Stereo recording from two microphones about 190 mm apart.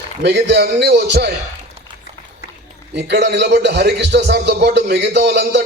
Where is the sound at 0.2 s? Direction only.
65° right (ahead or behind).